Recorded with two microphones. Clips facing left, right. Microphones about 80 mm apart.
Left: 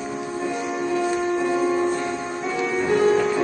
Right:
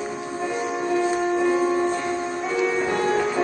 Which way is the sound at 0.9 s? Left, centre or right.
Centre.